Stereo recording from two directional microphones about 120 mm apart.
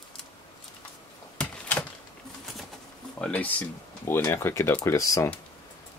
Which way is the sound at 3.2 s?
10° left (ahead or behind).